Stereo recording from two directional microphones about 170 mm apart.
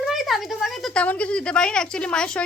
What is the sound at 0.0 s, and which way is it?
A woman's voice, centre (ahead or behind).